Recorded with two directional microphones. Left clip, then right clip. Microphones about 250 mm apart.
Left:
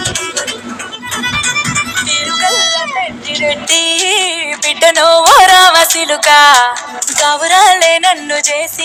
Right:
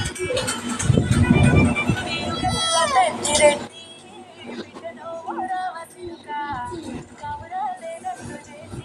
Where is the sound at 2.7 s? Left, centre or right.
Centre.